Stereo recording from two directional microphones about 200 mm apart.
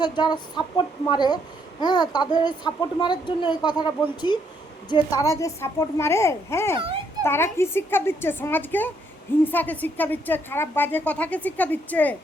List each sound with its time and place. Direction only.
0.0 s a child's voice: 20° left (ahead or behind)